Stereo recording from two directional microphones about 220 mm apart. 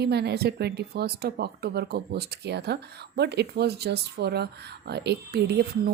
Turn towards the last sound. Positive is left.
turn(degrees=-45)  # may be behind; listen again after turning